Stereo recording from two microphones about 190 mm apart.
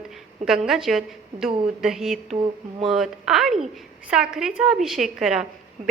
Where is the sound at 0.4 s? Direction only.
5° right (ahead or behind).